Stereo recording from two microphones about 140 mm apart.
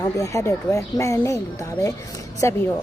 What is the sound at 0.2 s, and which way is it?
A woman's voice, 20° left (ahead or behind).